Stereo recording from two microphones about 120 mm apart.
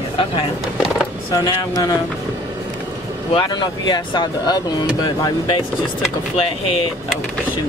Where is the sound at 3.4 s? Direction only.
40° left (ahead or behind).